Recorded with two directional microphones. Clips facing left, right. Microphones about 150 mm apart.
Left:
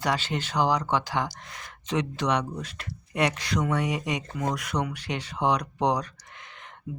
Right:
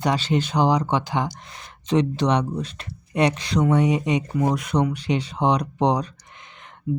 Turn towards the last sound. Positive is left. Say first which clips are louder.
# right 1 dB
turn(degrees=-20)  # may be behind; listen again after turning